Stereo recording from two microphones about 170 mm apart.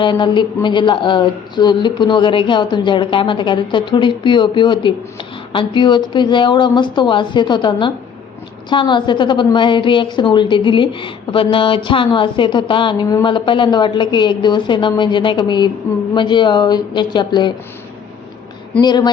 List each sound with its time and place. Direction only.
0.0 s speech: 30° left (ahead or behind)
18.8 s speech: 25° left (ahead or behind)